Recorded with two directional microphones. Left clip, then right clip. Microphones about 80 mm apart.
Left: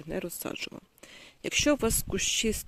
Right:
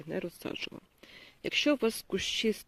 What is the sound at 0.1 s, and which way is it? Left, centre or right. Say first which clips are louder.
Speech: left 2 dB; left.